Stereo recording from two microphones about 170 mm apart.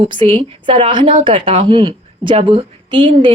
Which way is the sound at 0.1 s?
30° right (ahead or behind).